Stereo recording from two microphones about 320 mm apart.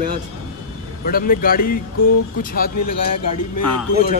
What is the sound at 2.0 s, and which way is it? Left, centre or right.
Speech, left.